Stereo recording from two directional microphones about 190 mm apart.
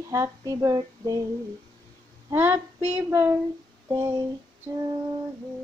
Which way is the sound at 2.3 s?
10° right (ahead or behind).